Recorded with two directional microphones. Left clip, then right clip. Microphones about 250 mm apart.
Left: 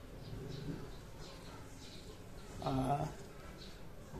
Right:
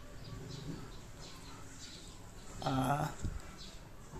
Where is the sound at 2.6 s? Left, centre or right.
Right.